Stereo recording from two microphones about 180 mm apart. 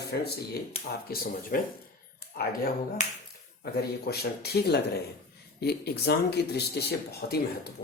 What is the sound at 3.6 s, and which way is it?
Speech, 60° left (ahead or behind).